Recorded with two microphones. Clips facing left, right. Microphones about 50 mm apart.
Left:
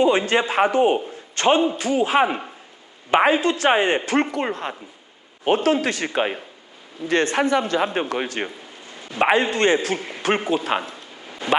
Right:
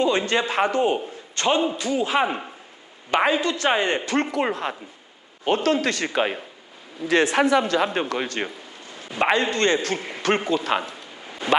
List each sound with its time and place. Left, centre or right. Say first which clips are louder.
0.0 s a man's voice: left 3 dB; centre
2.2 s a man's voice: left 3 dB; centre
3.1 s a woman's voice: left 3 dB; left
4.3 s a man's voice: right 1 dB; centre
5.5 s a man's voice: left 2 dB; centre
10.0 s a sound: even; centre
10.2 s a man's voice: left 1 dB; centre
11.3 s a sound: even; centre